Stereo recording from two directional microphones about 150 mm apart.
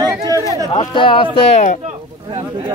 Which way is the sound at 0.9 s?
35° left (ahead or behind).